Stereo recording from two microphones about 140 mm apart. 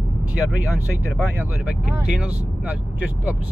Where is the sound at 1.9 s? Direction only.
10° right (ahead or behind).